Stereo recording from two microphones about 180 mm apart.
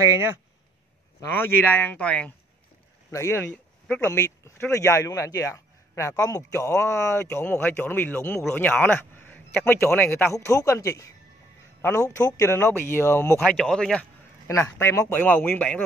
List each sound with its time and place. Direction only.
0.0 s speech: 15° right (ahead or behind)
1.2 s speech: 10° left (ahead or behind)
13.4 s speech: 5° left (ahead or behind)
14.5 s speech: 15° left (ahead or behind)